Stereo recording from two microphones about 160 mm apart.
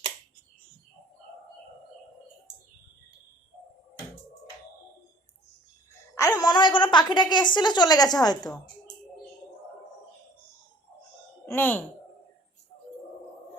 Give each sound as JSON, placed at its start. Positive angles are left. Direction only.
{"t": 6.1, "sound": "a woman's voice", "side_deg": 20}
{"t": 11.4, "sound": "speech", "side_deg": 15}